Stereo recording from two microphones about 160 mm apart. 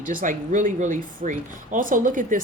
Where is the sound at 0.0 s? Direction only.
60° right (ahead or behind).